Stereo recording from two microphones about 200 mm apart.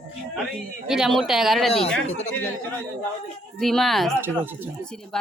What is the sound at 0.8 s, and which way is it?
Speech, 5° right (ahead or behind).